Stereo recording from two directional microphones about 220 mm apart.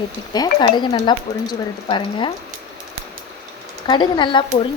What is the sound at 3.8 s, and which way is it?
Speech, 20° left (ahead or behind).